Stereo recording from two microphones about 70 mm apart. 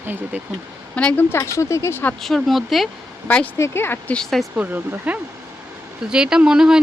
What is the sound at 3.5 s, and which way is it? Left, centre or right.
Speech, left.